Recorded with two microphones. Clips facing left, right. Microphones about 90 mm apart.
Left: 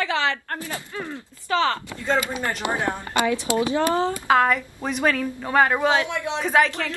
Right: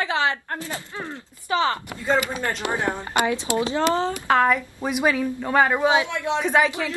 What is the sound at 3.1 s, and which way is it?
Speech, 20° right (ahead or behind).